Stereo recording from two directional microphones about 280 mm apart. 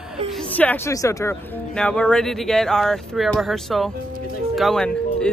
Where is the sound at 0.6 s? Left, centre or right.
Centre.